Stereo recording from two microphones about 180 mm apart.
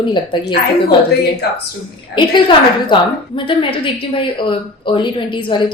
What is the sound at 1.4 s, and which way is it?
Speech, 60° left (ahead or behind).